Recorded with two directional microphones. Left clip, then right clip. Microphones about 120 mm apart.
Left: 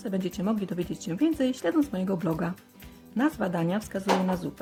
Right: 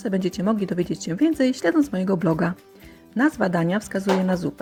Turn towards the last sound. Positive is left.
turn(degrees=-35)  # may be behind; listen again after turning